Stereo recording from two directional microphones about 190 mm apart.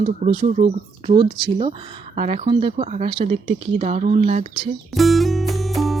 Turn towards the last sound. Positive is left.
turn(degrees=0)  # may be behind; listen again after turning